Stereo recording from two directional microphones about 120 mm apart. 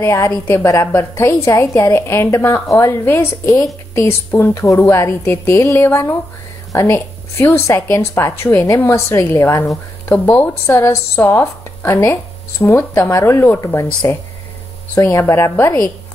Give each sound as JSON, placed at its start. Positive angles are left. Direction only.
{"t": 0.0, "sound": "a woman's voice", "side_deg": 20}
{"t": 10.7, "sound": "speech", "side_deg": 25}